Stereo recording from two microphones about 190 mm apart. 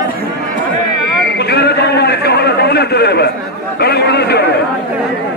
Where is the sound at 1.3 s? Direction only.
60° left (ahead or behind).